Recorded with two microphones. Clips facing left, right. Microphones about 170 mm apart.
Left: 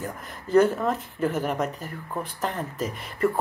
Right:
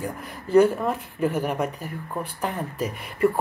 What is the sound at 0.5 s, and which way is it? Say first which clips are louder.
Speech: right 2 dB; 10° right (ahead or behind).